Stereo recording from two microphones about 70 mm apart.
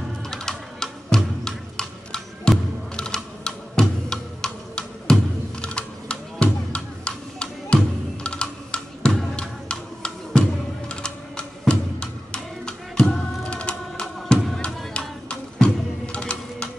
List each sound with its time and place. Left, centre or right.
0.3 s music: centre
3.0 s tick-tock: centre
5.6 s music: centre